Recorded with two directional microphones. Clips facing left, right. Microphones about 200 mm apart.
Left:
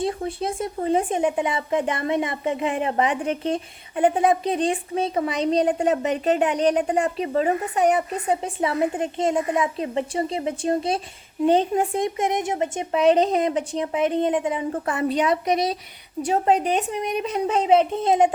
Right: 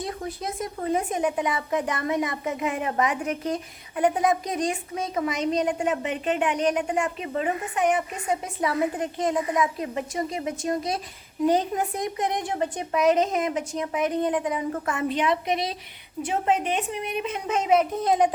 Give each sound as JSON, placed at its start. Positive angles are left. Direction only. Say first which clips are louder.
{"t": 0.0, "sound": "speech", "louder": "left 6 dB", "side_deg": 30}
{"t": 16.2, "sound": "speech", "louder": "left 4 dB", "side_deg": 35}